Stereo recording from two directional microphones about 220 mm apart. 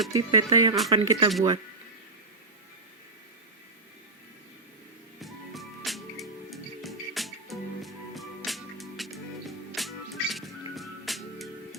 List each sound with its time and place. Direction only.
0.1 s speech: 20° right (ahead or behind)
5.2 s music: centre (ahead or behind)